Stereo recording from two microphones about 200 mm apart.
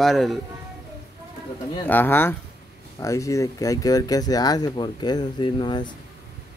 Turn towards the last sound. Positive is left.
turn(degrees=25)  # may be behind; listen again after turning